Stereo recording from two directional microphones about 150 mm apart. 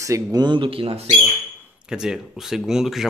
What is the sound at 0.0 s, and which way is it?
Speech, 25° right (ahead or behind).